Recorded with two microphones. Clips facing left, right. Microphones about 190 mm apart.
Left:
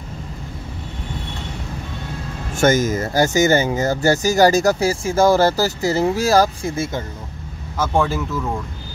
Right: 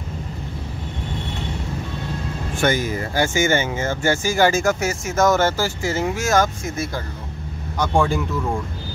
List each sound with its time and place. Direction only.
2.5 s speech: 45° left (ahead or behind)
7.8 s speech: centre (ahead or behind)